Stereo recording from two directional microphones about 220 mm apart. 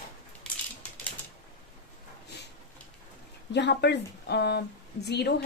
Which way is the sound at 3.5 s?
50° left (ahead or behind).